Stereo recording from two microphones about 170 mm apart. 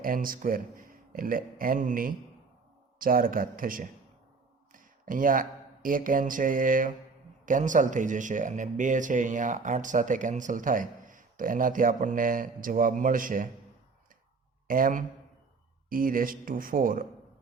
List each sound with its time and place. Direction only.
0.0 s a man's voice: 55° right (ahead or behind)
14.7 s a man's voice: 55° right (ahead or behind)